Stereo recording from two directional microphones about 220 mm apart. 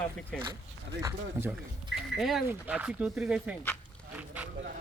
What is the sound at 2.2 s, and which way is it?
Speech, centre (ahead or behind).